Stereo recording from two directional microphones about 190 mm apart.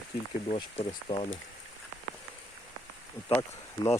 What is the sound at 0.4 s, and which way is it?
Speech, 35° left (ahead or behind).